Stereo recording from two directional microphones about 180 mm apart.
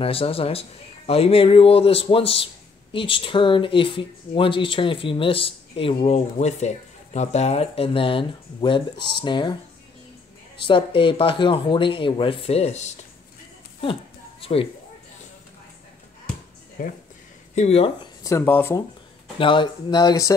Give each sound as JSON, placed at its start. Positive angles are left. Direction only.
{"t": 0.0, "sound": "speech", "side_deg": 30}
{"t": 10.7, "sound": "speech", "side_deg": 30}
{"t": 14.4, "sound": "speech", "side_deg": 30}
{"t": 16.8, "sound": "speech", "side_deg": 50}
{"t": 17.6, "sound": "speech", "side_deg": 35}
{"t": 18.2, "sound": "speech", "side_deg": 15}
{"t": 19.3, "sound": "speech", "side_deg": 25}